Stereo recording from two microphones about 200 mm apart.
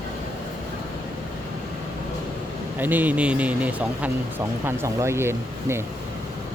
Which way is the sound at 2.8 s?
10° right (ahead or behind).